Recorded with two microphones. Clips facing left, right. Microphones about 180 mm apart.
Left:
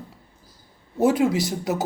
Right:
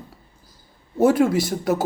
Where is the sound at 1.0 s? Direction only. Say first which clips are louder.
Right 2 dB; 15° left (ahead or behind).